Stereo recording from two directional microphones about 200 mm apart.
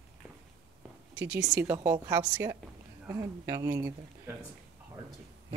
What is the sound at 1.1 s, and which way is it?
Speech, 10° right (ahead or behind).